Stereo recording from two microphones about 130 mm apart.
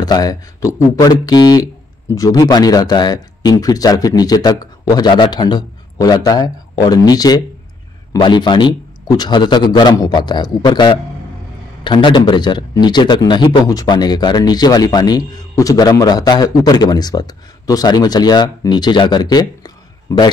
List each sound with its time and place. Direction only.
0.0 s a man's voice: 30° left (ahead or behind)